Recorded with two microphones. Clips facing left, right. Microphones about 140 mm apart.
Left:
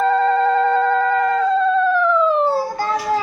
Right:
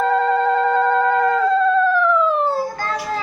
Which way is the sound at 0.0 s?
5° right (ahead or behind).